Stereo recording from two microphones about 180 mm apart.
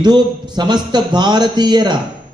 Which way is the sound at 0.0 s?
25° right (ahead or behind).